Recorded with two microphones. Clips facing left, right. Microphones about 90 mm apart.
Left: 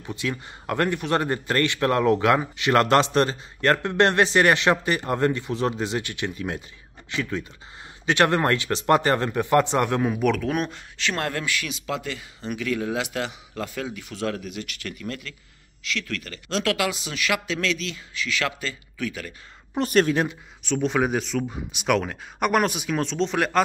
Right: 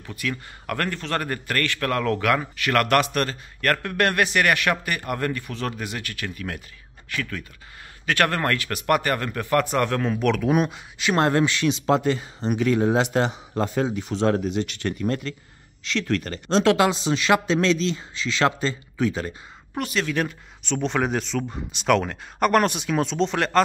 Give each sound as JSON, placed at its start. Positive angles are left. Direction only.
{"t": 0.0, "sound": "a man's voice", "side_deg": 25}
{"t": 10.4, "sound": "speech", "side_deg": -5}
{"t": 11.1, "sound": "speech", "side_deg": -25}
{"t": 19.8, "sound": "a man's voice", "side_deg": 20}
{"t": 20.2, "sound": "speech", "side_deg": 5}